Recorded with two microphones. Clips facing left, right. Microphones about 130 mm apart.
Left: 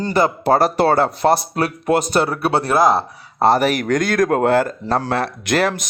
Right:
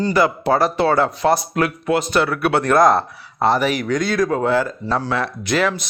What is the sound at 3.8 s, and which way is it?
A man's voice, 50° left (ahead or behind).